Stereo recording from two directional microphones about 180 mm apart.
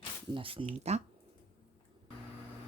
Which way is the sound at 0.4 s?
30° right (ahead or behind).